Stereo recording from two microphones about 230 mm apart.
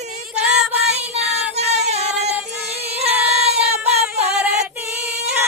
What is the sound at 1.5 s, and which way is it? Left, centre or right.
Child singing, right.